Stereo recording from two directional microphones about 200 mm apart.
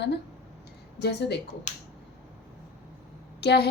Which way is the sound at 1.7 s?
35° left (ahead or behind).